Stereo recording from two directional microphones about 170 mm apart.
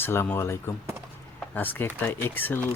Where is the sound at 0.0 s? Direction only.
15° left (ahead or behind).